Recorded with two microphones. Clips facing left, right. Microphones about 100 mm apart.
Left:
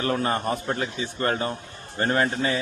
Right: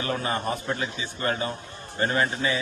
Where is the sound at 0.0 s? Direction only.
45° left (ahead or behind).